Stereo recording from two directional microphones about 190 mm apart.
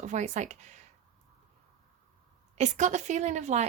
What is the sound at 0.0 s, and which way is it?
Speech, 40° right (ahead or behind).